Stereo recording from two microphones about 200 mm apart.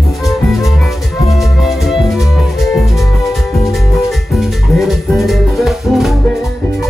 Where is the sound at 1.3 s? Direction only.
Centre (ahead or behind).